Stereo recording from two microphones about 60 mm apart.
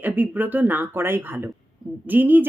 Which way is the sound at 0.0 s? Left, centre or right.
Right.